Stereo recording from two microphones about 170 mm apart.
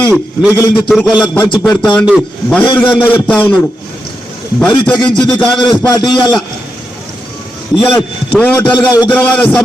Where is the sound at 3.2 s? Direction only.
5° left (ahead or behind).